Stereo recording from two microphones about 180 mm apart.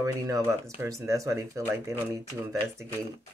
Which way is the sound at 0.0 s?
15° right (ahead or behind).